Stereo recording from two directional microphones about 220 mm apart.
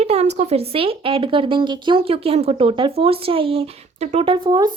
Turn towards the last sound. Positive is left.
turn(degrees=-20)  # may be behind; listen again after turning